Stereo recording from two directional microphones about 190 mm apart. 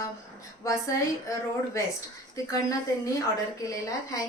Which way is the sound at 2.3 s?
15° left (ahead or behind).